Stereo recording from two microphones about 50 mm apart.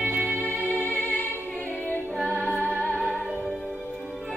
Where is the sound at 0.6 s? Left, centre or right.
Left.